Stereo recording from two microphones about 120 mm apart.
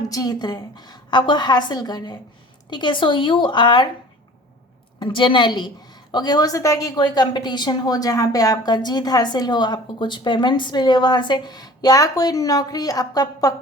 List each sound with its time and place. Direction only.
0.1 s a woman's voice: 30° left (ahead or behind)
4.9 s a woman's voice: 45° left (ahead or behind)